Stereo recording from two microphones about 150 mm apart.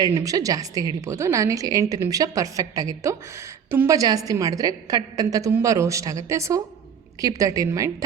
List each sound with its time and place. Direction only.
0.0 s a woman's voice: 25° right (ahead or behind)